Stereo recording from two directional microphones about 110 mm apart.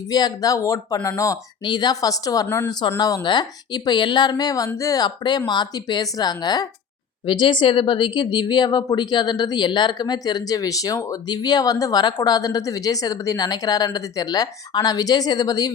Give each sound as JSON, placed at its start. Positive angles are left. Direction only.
{"t": 0.1, "sound": "speech", "side_deg": 35}
{"t": 1.6, "sound": "speech", "side_deg": 40}
{"t": 2.8, "sound": "speech", "side_deg": 50}